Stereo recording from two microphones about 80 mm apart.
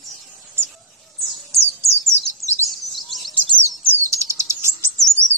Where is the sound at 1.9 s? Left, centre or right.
Right.